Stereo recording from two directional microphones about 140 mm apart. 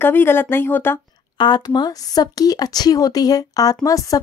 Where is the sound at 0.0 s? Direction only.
15° left (ahead or behind).